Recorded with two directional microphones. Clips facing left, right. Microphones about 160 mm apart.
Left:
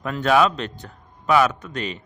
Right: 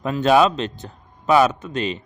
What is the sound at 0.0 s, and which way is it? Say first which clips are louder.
A man's voice: right 3 dB; 25° right (ahead or behind).